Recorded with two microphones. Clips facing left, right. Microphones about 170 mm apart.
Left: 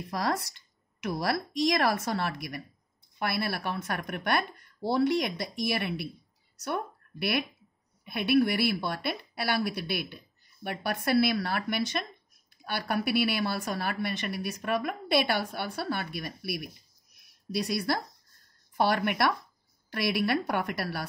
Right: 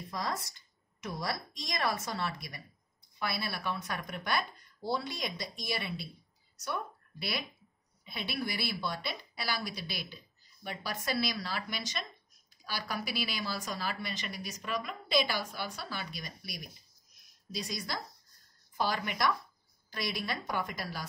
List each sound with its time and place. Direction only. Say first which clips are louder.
0.1 s a woman's voice: left 7 dB; 70° left (ahead or behind)